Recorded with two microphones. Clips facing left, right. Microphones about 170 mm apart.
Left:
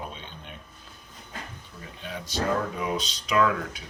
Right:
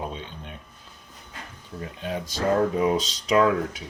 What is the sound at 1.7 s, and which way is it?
Speech, 45° right (ahead or behind).